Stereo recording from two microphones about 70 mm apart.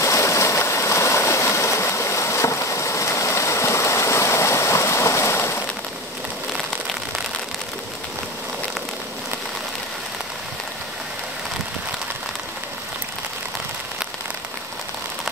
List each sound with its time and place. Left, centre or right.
0.0 s stream: left